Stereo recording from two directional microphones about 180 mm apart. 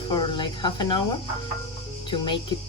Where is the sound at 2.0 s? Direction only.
25° left (ahead or behind).